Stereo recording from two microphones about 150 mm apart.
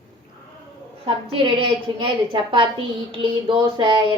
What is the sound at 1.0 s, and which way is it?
A woman's voice, 35° right (ahead or behind).